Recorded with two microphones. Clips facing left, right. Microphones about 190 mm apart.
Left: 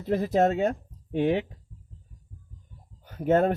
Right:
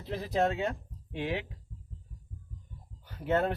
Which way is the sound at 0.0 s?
50° left (ahead or behind).